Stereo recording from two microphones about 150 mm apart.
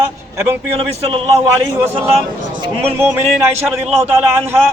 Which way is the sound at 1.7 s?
15° right (ahead or behind).